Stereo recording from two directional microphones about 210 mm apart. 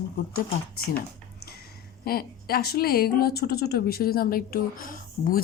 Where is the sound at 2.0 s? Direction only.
45° left (ahead or behind).